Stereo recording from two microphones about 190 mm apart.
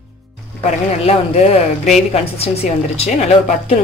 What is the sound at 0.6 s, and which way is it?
Speech, 35° left (ahead or behind).